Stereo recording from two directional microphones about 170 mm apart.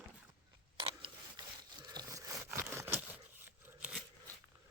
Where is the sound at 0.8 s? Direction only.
30° right (ahead or behind).